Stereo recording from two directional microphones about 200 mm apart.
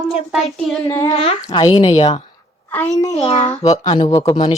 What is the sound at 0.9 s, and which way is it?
A woman's voice, 20° left (ahead or behind).